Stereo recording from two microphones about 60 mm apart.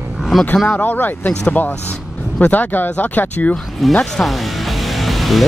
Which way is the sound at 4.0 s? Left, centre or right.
Centre.